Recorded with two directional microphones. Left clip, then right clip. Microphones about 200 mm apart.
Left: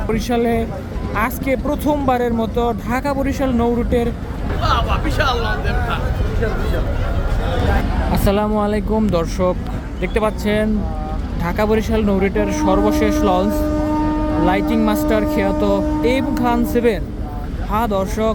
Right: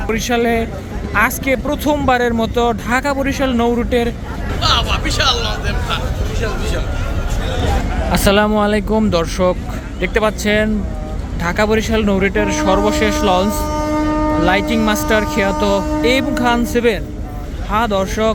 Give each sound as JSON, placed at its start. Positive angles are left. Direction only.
{"t": 0.1, "sound": "speech", "side_deg": 5}
{"t": 4.6, "sound": "speech", "side_deg": 35}
{"t": 8.1, "sound": "speech", "side_deg": 0}